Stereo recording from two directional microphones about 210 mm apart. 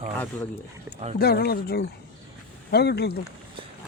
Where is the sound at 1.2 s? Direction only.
50° left (ahead or behind).